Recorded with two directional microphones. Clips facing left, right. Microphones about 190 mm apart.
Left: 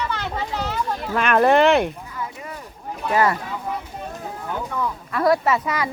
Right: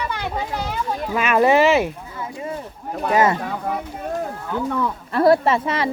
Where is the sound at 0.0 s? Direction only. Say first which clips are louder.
Right 1 dB; 10° right (ahead or behind).